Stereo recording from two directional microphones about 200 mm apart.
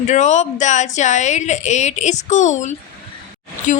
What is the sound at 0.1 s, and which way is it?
A woman's voice, 35° left (ahead or behind).